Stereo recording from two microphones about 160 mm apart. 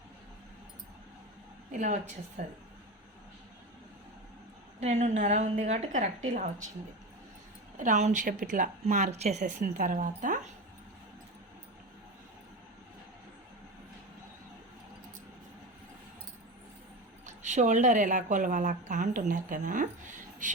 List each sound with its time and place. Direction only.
2.4 s a woman's voice: 50° right (ahead or behind)
4.8 s a woman's voice: 45° right (ahead or behind)
7.8 s a woman's voice: 50° right (ahead or behind)
17.2 s a woman's voice: 45° right (ahead or behind)